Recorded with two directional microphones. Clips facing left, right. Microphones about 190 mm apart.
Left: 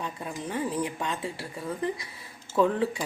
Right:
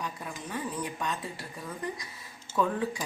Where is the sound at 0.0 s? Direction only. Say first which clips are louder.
Left 4 dB; 25° left (ahead or behind).